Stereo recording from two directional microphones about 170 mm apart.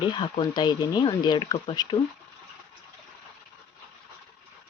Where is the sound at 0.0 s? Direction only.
30° left (ahead or behind).